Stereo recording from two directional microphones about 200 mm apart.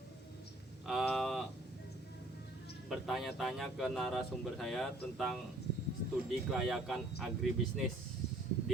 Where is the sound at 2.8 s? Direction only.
Centre (ahead or behind).